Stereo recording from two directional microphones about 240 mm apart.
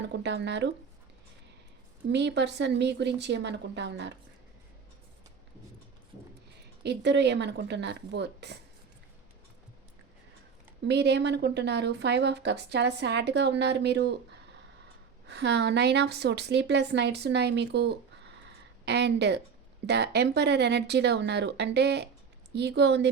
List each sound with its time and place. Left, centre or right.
0.0 s a woman's voice: right
2.1 s a woman's voice: right
6.8 s a woman's voice: right
10.8 s a woman's voice: right
15.3 s a woman's voice: right